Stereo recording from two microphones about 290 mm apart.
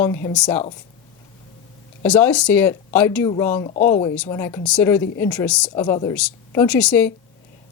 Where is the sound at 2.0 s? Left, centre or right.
Centre.